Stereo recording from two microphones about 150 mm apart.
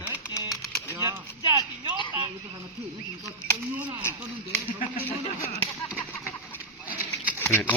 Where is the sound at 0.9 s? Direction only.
20° right (ahead or behind).